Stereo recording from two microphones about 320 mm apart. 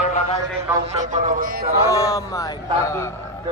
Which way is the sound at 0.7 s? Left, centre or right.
Centre.